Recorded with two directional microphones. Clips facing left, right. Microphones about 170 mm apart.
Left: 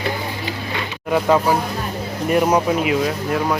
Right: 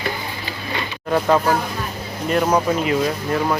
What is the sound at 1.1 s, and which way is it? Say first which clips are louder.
Speech: left 1 dB; 5° left (ahead or behind).